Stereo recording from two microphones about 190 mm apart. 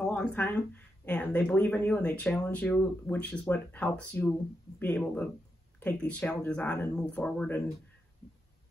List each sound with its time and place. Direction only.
0.0 s speech: 5° left (ahead or behind)